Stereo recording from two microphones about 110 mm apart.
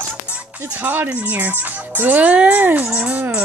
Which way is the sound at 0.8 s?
20° right (ahead or behind).